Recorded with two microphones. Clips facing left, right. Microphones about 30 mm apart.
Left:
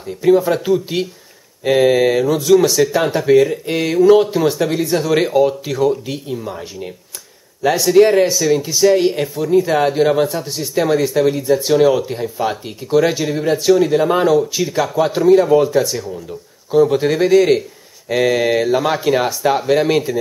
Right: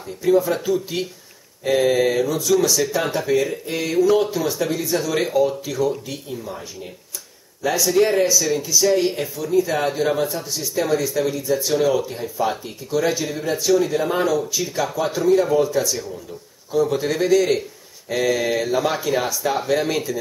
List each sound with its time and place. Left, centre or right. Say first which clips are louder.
0.2 s speech: left 5 dB; left
2.8 s speech: left 6 dB; centre
7.6 s speech: left 5 dB; left
7.9 s speech: left 6 dB; left
10.3 s speech: left 5 dB; left
19.5 s speech: left 6 dB; left